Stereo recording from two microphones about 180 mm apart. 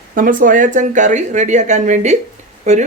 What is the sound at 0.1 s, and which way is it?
Speech, 50° right (ahead or behind).